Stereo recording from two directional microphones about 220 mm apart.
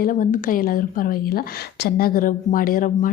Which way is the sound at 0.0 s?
40° left (ahead or behind).